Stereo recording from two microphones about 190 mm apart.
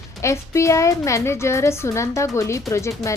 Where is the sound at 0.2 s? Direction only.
15° left (ahead or behind).